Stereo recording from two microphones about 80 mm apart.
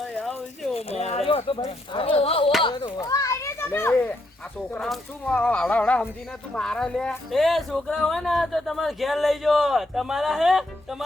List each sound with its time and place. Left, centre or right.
0.0 s a sound: centre
1.5 s speech: left
3.0 s a child's voice: left
4.8 s speech: centre
5.4 s speech: centre